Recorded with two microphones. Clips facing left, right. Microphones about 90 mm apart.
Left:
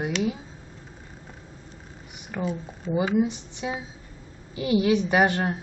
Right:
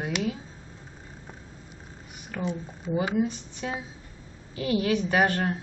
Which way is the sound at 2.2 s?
15° left (ahead or behind).